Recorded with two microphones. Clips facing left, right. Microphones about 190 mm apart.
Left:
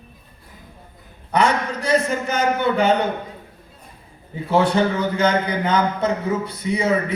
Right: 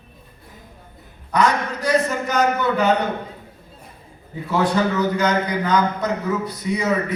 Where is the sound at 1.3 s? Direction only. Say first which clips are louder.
Even; 25° left (ahead or behind).